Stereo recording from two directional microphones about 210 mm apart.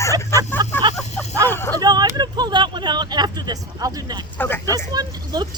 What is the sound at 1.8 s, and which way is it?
Speech, 20° right (ahead or behind).